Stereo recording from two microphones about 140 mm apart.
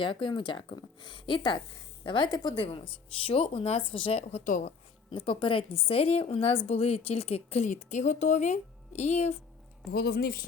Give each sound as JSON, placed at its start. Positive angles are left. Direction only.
{"t": 0.0, "sound": "a woman's voice", "side_deg": 35}
{"t": 5.1, "sound": "a woman's voice", "side_deg": 40}
{"t": 10.1, "sound": "speech", "side_deg": 90}